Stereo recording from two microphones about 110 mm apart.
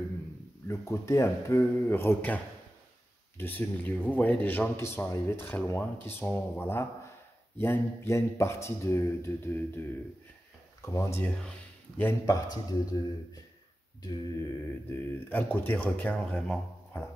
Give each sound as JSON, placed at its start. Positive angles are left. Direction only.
{"t": 0.7, "sound": "speech", "side_deg": 25}
{"t": 11.2, "sound": "speech", "side_deg": 5}
{"t": 12.3, "sound": "speech", "side_deg": 35}
{"t": 14.0, "sound": "speech", "side_deg": 25}